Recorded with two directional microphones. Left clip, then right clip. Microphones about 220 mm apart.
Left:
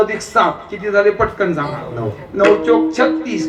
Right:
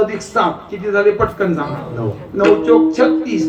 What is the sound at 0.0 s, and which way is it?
A man's voice, 20° left (ahead or behind).